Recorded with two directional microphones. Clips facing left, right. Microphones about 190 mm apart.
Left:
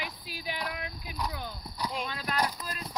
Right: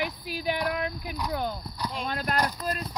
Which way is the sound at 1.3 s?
55° right (ahead or behind).